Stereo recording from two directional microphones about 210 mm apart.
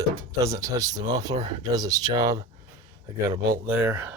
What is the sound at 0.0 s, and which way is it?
Speech, 15° right (ahead or behind).